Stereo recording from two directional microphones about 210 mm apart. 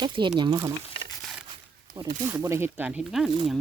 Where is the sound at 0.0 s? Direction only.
20° right (ahead or behind).